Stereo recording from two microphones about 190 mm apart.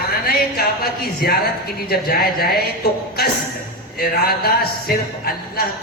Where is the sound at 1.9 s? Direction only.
55° left (ahead or behind).